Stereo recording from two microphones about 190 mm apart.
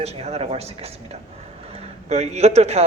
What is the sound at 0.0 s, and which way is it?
Speech, 35° right (ahead or behind).